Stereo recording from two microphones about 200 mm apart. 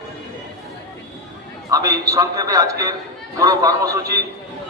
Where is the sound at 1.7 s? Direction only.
15° right (ahead or behind).